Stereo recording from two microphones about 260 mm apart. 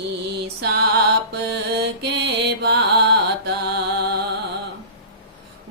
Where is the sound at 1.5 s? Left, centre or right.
Right.